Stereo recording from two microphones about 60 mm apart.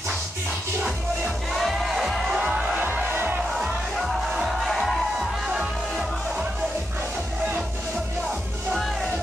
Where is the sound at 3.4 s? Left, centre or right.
Centre.